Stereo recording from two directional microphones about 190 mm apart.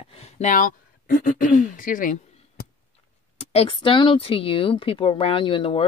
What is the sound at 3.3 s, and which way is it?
Speech, 30° left (ahead or behind).